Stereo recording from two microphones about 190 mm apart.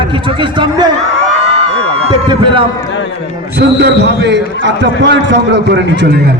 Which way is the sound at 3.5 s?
60° right (ahead or behind).